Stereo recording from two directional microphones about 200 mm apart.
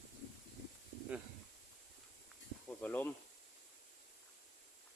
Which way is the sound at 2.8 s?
10° left (ahead or behind).